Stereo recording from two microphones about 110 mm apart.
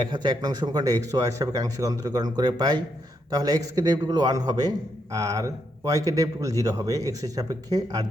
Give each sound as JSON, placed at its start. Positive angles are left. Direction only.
{"t": 0.0, "sound": "speech", "side_deg": -40}